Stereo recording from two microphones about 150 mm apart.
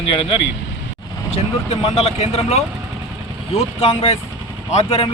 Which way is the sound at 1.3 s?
40° left (ahead or behind).